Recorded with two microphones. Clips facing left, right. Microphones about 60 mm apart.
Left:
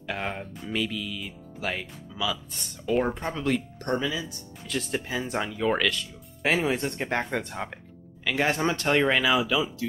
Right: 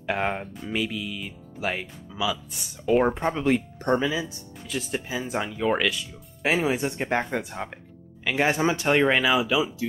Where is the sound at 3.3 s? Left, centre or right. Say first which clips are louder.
Right 4 dB; centre.